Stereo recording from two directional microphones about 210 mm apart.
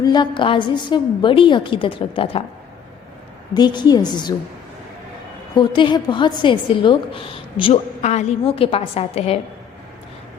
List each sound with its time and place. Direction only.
0.0 s a woman's voice: 20° left (ahead or behind)
3.5 s a woman's voice: 20° left (ahead or behind)
5.5 s a woman's voice: 20° left (ahead or behind)